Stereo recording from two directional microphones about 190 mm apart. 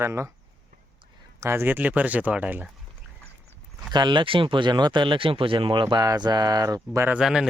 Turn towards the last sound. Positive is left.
turn(degrees=-5)  # may be behind; listen again after turning